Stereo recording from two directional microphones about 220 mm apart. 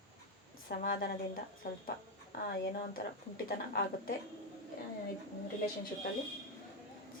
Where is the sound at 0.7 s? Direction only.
40° left (ahead or behind).